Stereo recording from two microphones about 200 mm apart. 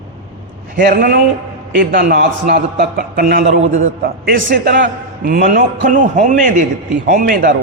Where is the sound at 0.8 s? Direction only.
50° right (ahead or behind).